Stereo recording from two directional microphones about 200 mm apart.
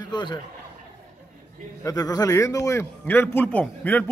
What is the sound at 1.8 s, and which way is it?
A man's voice, 20° left (ahead or behind).